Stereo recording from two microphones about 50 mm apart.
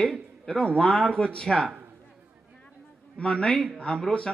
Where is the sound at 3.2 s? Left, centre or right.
Left.